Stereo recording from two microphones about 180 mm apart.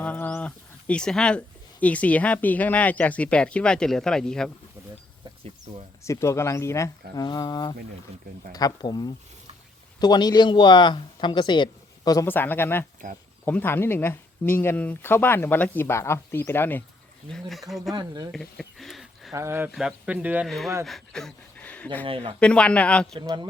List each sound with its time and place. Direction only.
0.0 s speech: 10° left (ahead or behind)
6.0 s speech: 15° left (ahead or behind)
13.0 s speech: 50° right (ahead or behind)
13.4 s speech: 10° left (ahead or behind)
17.3 s speech: centre (ahead or behind)
17.9 s speech: 25° right (ahead or behind)
18.3 s speech: centre (ahead or behind)
19.3 s speech: 15° right (ahead or behind); by 21.8 s 5° left (ahead or behind)
22.0 s speech: 30° right (ahead or behind)
22.4 s speech: 5° left (ahead or behind)
23.2 s speech: 25° right (ahead or behind)